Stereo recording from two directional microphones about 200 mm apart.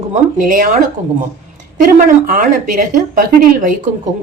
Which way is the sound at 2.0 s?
40° right (ahead or behind).